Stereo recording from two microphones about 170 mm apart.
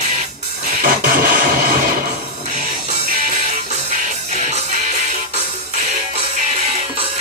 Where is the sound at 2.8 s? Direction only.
50° right (ahead or behind).